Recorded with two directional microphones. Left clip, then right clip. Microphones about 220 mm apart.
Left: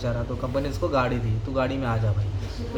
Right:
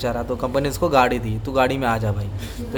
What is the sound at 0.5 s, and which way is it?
Speech, 50° right (ahead or behind).